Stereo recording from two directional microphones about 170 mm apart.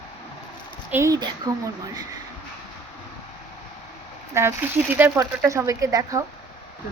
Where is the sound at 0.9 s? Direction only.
20° right (ahead or behind).